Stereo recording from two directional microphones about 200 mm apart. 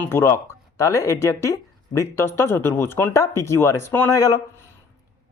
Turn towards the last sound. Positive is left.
turn(degrees=15)  # may be behind; listen again after turning